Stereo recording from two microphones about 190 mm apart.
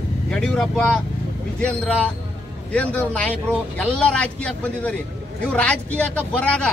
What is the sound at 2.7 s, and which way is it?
A man's voice, 5° left (ahead or behind).